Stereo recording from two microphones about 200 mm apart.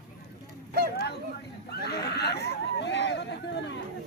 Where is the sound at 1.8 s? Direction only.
55° left (ahead or behind).